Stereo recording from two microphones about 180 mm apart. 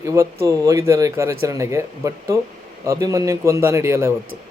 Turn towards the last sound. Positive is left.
turn(degrees=-15)  # may be behind; listen again after turning